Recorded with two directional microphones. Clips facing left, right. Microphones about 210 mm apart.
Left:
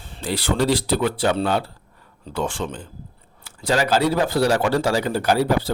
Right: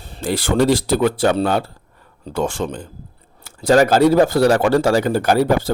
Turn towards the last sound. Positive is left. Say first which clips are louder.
# right 3 dB
turn(degrees=-50)  # may be behind; listen again after turning